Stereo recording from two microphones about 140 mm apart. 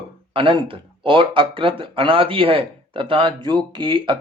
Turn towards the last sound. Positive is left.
turn(degrees=-35)  # may be behind; listen again after turning